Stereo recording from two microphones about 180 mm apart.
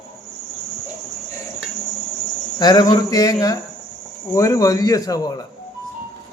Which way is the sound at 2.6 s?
25° left (ahead or behind).